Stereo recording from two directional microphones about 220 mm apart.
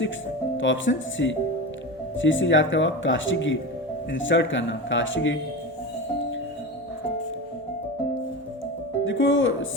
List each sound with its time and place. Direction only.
0.5 s speech: 60° left (ahead or behind)
9.0 s speech: 60° left (ahead or behind)